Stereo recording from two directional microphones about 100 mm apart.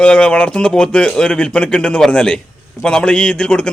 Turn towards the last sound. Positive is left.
turn(degrees=10)  # may be behind; listen again after turning